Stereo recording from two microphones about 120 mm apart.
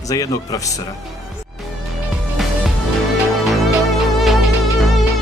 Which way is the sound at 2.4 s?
Centre (ahead or behind).